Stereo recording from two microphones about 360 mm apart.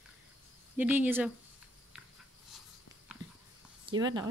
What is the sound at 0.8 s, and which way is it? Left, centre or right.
Speech, centre.